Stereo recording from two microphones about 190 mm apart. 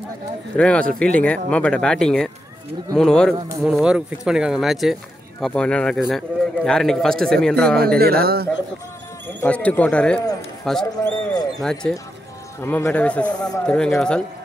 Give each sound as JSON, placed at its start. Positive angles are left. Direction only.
{"t": 0.6, "sound": "a man's voice", "side_deg": 5}
{"t": 8.0, "sound": "speech", "side_deg": -55}
{"t": 9.4, "sound": "a man's voice", "side_deg": 5}